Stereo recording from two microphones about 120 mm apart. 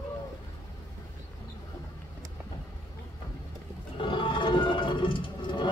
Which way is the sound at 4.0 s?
45° left (ahead or behind).